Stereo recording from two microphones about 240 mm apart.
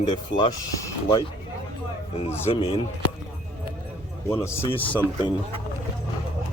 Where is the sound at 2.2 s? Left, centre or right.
Left.